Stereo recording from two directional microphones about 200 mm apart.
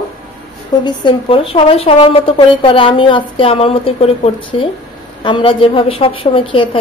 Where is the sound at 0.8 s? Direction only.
25° left (ahead or behind).